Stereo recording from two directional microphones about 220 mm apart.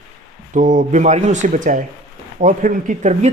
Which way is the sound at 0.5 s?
35° right (ahead or behind).